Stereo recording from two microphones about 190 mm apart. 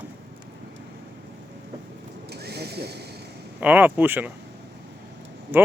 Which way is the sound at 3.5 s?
10° right (ahead or behind).